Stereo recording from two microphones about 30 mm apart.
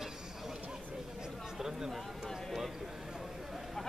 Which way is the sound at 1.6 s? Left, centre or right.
Centre.